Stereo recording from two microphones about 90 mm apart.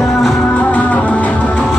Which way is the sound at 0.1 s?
Centre (ahead or behind).